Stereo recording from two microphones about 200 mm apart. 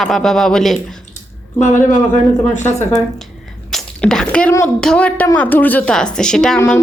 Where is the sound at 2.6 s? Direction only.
10° left (ahead or behind).